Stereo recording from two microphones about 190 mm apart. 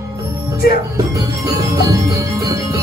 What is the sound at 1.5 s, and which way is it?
Music, 15° right (ahead or behind).